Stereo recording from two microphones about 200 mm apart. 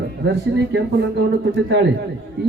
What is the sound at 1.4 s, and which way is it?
Speech, 60° right (ahead or behind).